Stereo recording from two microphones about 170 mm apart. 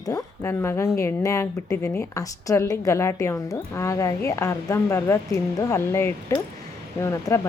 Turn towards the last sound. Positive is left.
turn(degrees=15)  # may be behind; listen again after turning